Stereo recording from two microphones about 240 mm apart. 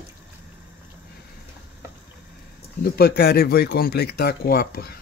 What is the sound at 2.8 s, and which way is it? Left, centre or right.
Speech, left.